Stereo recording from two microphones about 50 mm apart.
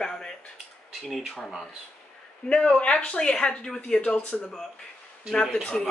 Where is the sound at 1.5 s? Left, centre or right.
Centre.